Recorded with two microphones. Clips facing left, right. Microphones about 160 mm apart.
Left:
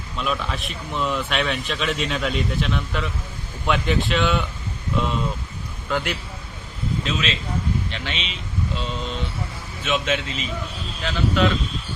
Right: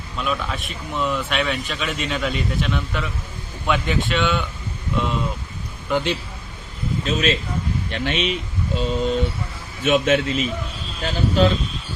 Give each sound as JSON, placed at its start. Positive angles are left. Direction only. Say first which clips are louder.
{"t": 0.2, "sound": "speech", "louder": "right 1 dB", "side_deg": 0}
{"t": 5.9, "sound": "a man's voice", "louder": "right 4 dB", "side_deg": -20}
{"t": 7.0, "sound": "speech", "louder": "right 8 dB", "side_deg": -45}
{"t": 11.0, "sound": "speech", "louder": "right 3 dB", "side_deg": -35}